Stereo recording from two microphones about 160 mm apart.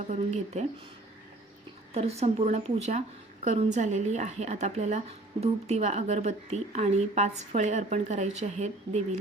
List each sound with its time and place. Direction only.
0.1 s a woman's voice: 45° right (ahead or behind)
1.9 s a woman's voice: 40° right (ahead or behind)